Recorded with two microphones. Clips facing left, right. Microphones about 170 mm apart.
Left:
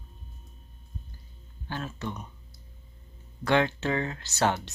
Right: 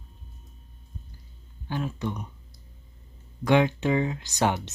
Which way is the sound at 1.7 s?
15° right (ahead or behind).